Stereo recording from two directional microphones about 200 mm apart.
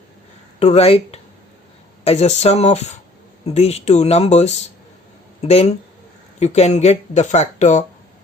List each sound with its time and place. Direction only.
0.6 s speech: 30° left (ahead or behind)